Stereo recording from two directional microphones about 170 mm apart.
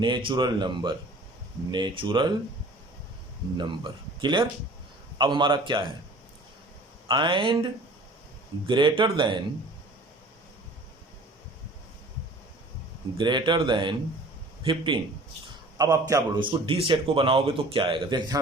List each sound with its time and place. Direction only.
0.0 s a man's voice: 30° right (ahead or behind)
3.6 s a man's voice: 25° right (ahead or behind)
7.1 s a man's voice: 30° right (ahead or behind)
13.1 s a man's voice: 25° right (ahead or behind)